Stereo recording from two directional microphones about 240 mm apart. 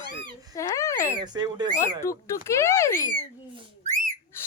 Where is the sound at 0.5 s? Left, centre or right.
Centre.